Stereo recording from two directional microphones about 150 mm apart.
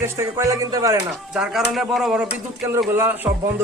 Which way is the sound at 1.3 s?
5° right (ahead or behind).